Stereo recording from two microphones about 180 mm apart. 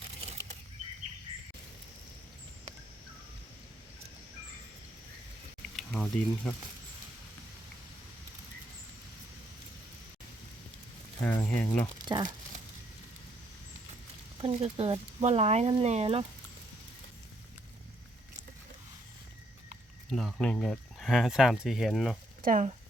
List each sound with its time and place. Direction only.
0.2 s bird flight: 35° right (ahead or behind)
5.7 s speech: 5° left (ahead or behind)
11.2 s speech: 10° left (ahead or behind)
11.9 s speech: 25° right (ahead or behind)
14.4 s speech: 30° right (ahead or behind)
20.1 s speech: centre (ahead or behind)
22.4 s speech: 45° right (ahead or behind)